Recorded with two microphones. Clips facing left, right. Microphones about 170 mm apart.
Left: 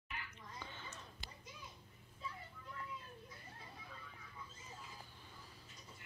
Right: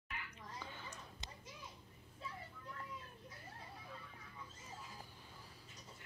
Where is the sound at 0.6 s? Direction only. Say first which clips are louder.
Even; 10° right (ahead or behind).